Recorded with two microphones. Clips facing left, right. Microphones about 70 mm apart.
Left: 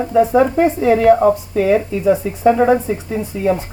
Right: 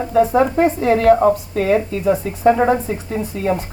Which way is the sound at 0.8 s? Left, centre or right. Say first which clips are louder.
Left 3 dB; centre.